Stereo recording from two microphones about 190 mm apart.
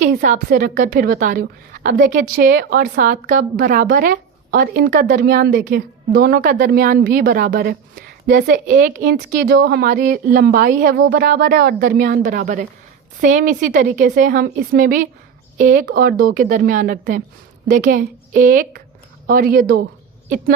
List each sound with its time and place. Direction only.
0.1 s a woman's voice: 45° right (ahead or behind)
14.3 s a woman's voice: 50° right (ahead or behind)